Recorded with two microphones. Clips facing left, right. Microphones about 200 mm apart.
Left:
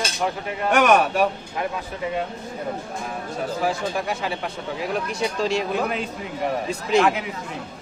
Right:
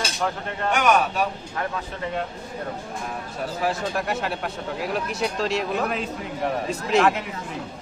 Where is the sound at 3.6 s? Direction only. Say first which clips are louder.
Even; centre (ahead or behind).